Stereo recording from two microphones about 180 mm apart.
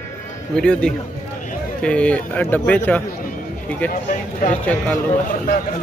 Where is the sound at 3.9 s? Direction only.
45° left (ahead or behind).